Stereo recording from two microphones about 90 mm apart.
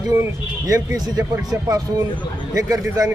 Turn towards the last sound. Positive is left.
turn(degrees=-40)  # may be behind; listen again after turning